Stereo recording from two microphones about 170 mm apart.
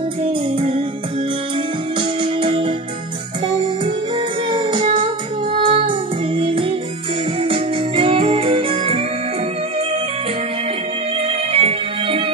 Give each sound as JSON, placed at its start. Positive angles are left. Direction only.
{"t": 0.6, "sound": "music", "side_deg": -35}
{"t": 2.0, "sound": "keyboard", "side_deg": -30}
{"t": 3.4, "sound": "music", "side_deg": -30}
{"t": 11.1, "sound": "music", "side_deg": -35}